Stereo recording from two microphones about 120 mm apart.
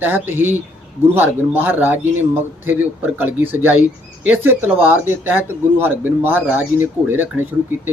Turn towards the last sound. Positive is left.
turn(degrees=-15)  # may be behind; listen again after turning